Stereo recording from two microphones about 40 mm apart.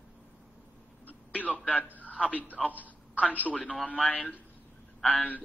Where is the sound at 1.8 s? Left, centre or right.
Left.